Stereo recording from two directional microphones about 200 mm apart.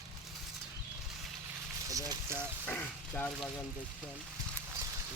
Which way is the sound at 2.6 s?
5° left (ahead or behind).